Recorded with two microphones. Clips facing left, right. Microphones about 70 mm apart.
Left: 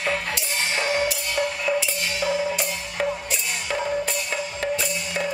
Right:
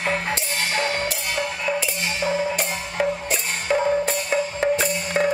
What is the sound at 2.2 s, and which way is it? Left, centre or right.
Music, right.